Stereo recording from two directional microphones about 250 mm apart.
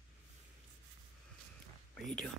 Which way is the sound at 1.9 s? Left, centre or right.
Centre.